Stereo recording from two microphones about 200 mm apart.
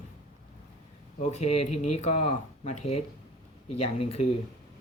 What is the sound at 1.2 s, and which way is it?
Speech, 35° left (ahead or behind).